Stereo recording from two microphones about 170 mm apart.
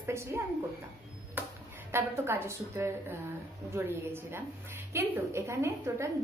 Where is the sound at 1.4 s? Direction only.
10° right (ahead or behind).